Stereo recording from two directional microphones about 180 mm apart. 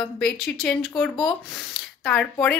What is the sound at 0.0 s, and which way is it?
A woman's voice, 5° left (ahead or behind).